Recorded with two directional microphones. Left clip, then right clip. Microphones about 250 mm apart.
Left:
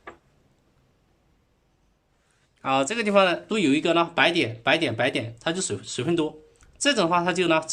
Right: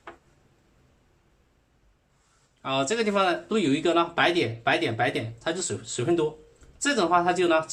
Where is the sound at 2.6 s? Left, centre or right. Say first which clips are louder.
Left 2 dB; left.